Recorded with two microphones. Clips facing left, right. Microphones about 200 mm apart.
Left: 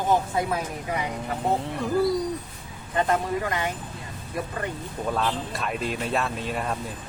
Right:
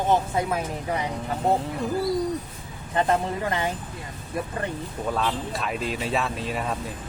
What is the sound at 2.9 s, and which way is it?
Speech, 25° right (ahead or behind).